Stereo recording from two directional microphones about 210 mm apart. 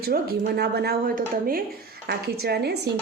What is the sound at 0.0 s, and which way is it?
A woman's voice, 45° right (ahead or behind).